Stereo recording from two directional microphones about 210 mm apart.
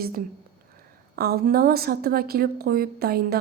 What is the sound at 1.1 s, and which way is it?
A woman's voice, 45° right (ahead or behind).